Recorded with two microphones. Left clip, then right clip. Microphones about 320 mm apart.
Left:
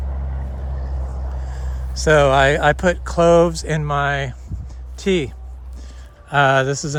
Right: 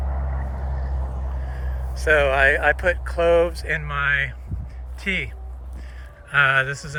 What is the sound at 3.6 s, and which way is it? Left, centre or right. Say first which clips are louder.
Speech: left 2 dB; centre.